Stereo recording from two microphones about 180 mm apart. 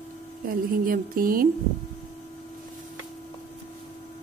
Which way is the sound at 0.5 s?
55° right (ahead or behind).